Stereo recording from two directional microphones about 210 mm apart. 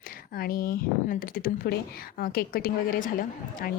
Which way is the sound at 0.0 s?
45° left (ahead or behind).